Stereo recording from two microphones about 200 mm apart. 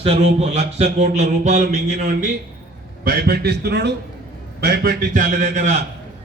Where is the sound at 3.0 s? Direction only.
50° right (ahead or behind).